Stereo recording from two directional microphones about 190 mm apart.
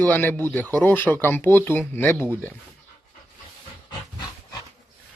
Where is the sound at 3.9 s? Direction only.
25° left (ahead or behind).